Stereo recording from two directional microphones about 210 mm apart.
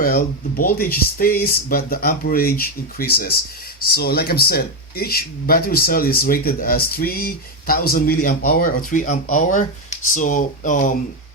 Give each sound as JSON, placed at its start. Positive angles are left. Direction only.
{"t": 0.0, "sound": "speech", "side_deg": 45}